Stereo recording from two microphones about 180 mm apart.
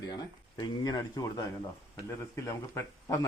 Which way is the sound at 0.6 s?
25° left (ahead or behind).